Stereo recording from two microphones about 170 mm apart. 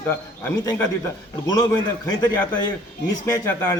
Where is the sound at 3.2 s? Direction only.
15° left (ahead or behind).